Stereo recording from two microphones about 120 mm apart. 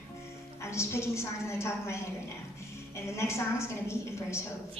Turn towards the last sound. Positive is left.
turn(degrees=25)  # may be behind; listen again after turning